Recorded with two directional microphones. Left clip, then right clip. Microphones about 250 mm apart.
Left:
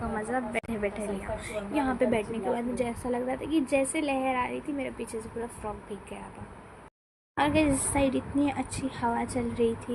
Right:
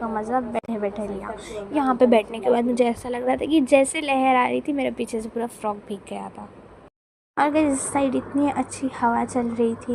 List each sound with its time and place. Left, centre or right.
0.2 s a woman's voice: centre
0.5 s a woman's voice: centre
2.0 s a woman's voice: right
7.3 s a woman's voice: centre